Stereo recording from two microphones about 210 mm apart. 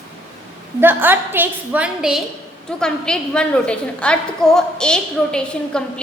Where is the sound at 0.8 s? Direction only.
10° right (ahead or behind).